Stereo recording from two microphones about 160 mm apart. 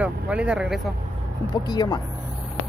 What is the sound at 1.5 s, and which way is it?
Speech, 25° left (ahead or behind).